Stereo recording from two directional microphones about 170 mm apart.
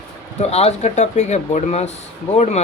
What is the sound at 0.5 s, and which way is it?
Speech, 40° left (ahead or behind).